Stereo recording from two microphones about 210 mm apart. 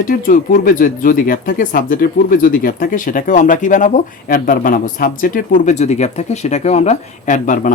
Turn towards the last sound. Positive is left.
turn(degrees=40)  # may be behind; listen again after turning